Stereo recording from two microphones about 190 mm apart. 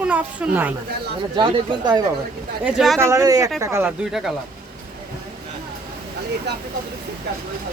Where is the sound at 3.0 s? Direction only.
15° right (ahead or behind).